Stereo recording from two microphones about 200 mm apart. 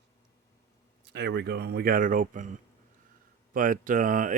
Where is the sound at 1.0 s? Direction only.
60° right (ahead or behind); by 2.5 s 40° right (ahead or behind).